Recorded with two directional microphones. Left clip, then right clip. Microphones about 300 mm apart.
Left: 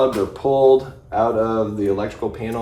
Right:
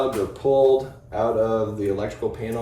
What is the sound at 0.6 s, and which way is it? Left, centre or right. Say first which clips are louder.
Speech: left 7 dB; centre.